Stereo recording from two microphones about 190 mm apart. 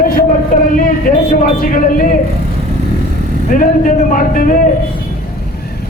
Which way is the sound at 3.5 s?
45° left (ahead or behind).